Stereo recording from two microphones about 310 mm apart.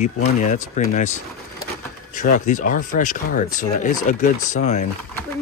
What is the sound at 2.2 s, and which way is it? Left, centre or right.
Speech, left.